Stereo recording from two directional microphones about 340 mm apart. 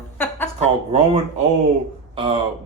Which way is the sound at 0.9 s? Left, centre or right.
Centre.